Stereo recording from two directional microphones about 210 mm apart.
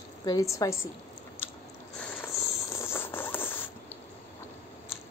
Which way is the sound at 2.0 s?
10° left (ahead or behind).